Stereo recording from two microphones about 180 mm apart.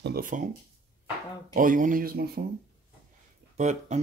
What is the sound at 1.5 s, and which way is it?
Speech, 50° right (ahead or behind).